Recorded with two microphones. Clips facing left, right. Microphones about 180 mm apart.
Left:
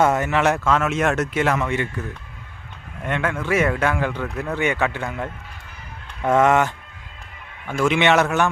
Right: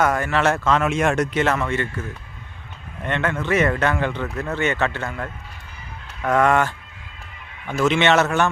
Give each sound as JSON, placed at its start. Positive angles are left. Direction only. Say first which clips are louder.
{"t": 0.0, "sound": "speech", "louder": "left 1 dB", "side_deg": 20}
{"t": 3.0, "sound": "speech", "louder": "even", "side_deg": 5}
{"t": 7.9, "sound": "speech", "louder": "even", "side_deg": 10}